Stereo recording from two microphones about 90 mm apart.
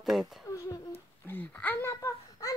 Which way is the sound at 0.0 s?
5° right (ahead or behind).